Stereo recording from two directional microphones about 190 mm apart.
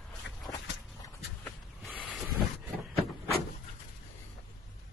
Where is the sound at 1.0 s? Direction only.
10° left (ahead or behind).